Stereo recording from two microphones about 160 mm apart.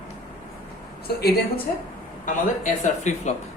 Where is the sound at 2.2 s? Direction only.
50° left (ahead or behind).